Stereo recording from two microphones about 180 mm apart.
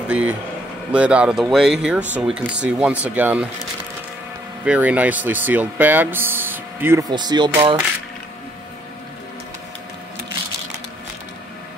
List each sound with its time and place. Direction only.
0.1 s speech: 5° right (ahead or behind)
4.6 s speech: 10° right (ahead or behind)
7.1 s speech: 25° right (ahead or behind)